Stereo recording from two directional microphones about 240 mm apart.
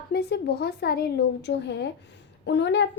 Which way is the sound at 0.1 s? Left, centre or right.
Left.